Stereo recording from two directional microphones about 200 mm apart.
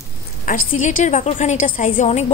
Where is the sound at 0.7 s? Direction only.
40° left (ahead or behind).